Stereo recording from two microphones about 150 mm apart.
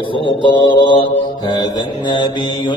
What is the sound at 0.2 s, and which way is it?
Mantra, 30° left (ahead or behind).